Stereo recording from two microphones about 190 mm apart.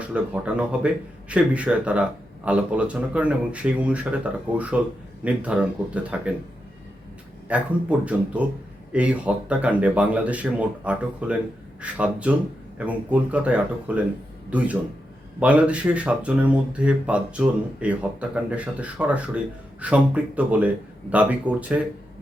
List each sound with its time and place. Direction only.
0.0 s speech: 5° right (ahead or behind)
7.4 s speech: 5° right (ahead or behind)
15.4 s speech: 5° right (ahead or behind)